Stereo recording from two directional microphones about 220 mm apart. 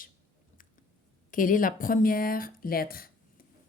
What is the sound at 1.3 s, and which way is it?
Speech, 40° left (ahead or behind).